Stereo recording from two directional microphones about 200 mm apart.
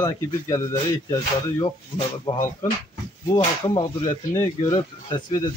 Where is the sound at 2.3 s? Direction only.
25° left (ahead or behind).